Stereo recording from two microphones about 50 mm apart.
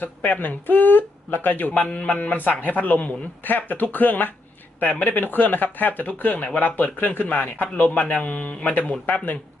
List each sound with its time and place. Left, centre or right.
0.0 s speech: left
1.8 s speech: left